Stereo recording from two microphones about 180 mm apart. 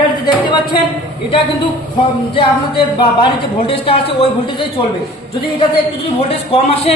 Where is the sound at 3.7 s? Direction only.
35° left (ahead or behind).